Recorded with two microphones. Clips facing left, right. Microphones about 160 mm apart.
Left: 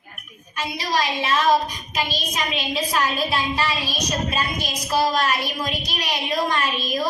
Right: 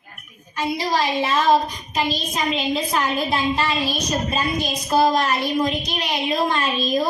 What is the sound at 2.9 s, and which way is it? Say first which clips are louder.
A woman's voice: right 1 dB; 20° right (ahead or behind).